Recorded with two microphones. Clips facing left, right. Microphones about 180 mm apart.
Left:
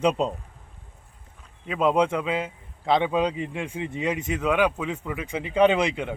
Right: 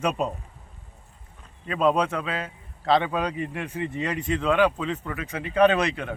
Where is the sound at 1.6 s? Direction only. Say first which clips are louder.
Left 1 dB; 15° left (ahead or behind).